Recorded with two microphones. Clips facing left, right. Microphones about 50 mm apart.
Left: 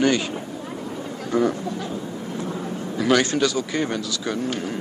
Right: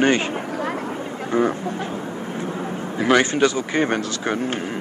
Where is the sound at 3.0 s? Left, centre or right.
Right.